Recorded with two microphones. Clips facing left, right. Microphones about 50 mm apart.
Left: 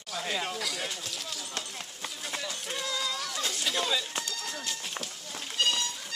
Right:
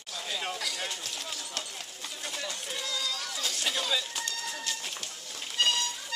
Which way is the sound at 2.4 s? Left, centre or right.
Centre.